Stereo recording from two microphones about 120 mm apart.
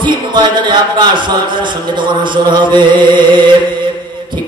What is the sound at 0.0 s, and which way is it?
Speech, 40° right (ahead or behind).